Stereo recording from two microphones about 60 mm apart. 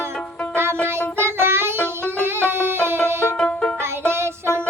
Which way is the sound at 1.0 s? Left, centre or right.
Right.